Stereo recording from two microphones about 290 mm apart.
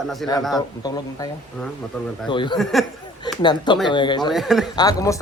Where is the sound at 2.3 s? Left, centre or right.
Centre.